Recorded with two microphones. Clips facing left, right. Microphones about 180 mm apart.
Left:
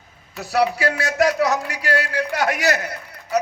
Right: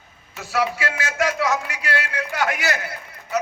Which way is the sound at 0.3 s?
40° left (ahead or behind).